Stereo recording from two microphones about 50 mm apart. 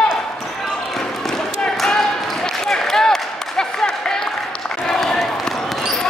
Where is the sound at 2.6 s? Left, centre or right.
Centre.